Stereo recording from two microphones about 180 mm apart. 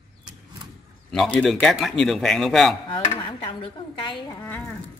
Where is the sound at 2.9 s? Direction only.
30° left (ahead or behind).